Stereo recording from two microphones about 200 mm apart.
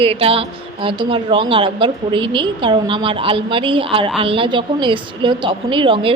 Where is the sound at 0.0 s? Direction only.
30° right (ahead or behind).